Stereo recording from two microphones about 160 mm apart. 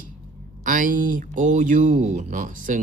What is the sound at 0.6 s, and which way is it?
Speech, 55° right (ahead or behind).